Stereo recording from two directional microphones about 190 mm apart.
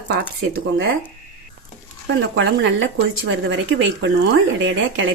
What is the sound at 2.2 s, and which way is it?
Speech, 70° right (ahead or behind).